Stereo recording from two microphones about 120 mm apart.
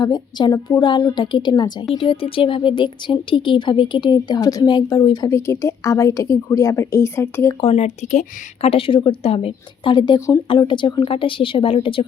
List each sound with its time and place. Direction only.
0.0 s speech: 35° left (ahead or behind)
2.0 s speech: 50° left (ahead or behind)
5.3 s a woman's voice: 25° left (ahead or behind)
7.6 s a woman's voice: 60° left (ahead or behind); by 8.7 s 85° left
8.7 s speech: 50° left (ahead or behind)
10.2 s a woman's voice: 25° left (ahead or behind)
10.5 s speech: 40° left (ahead or behind)